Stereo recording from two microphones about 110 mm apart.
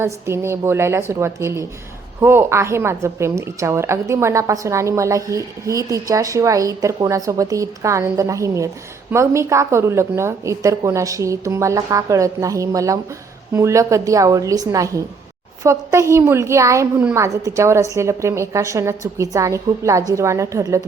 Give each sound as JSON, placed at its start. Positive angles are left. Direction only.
{"t": 0.0, "sound": "a woman's voice", "side_deg": -25}